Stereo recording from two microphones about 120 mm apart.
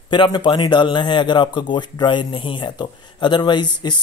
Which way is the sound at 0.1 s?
40° left (ahead or behind).